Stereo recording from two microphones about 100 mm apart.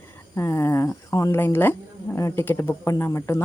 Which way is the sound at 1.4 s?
20° left (ahead or behind).